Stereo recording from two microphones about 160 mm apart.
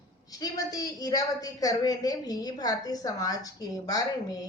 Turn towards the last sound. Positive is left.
turn(degrees=25)  # may be behind; listen again after turning